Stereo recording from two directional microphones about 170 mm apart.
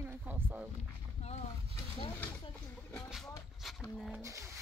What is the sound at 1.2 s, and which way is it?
Boat, 40° left (ahead or behind).